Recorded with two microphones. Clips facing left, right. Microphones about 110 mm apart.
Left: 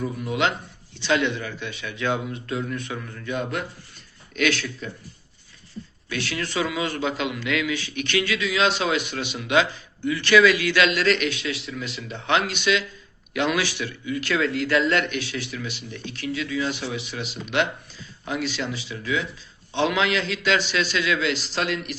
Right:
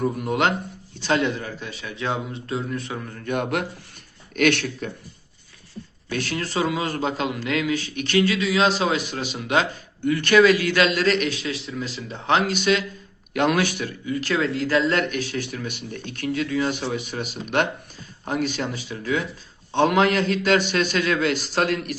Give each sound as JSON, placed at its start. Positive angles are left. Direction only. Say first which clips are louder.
{"t": 0.0, "sound": "a man's voice", "louder": "right 3 dB", "side_deg": -50}
{"t": 3.2, "sound": "speech", "louder": "right 4 dB", "side_deg": -60}
{"t": 6.1, "sound": "a man's voice", "louder": "right 2 dB", "side_deg": -45}